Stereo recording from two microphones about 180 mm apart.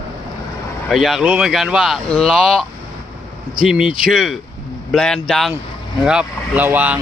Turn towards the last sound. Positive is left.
turn(degrees=-10)  # may be behind; listen again after turning